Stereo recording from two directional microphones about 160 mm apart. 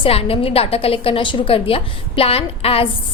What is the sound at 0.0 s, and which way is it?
A woman's voice, 35° left (ahead or behind).